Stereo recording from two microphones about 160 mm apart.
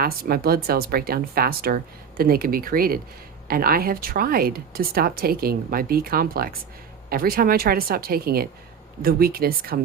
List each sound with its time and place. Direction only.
0.0 s speech: 70° right (ahead or behind)